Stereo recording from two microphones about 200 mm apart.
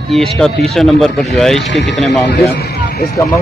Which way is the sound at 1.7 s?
60° left (ahead or behind).